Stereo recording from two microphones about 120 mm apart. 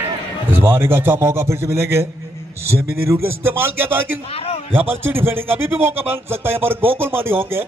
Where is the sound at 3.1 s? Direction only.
20° right (ahead or behind).